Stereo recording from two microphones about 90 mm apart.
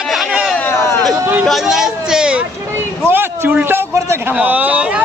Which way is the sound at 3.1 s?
25° right (ahead or behind).